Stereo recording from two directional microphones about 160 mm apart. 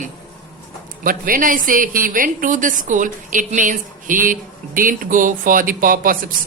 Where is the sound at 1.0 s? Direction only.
60° right (ahead or behind).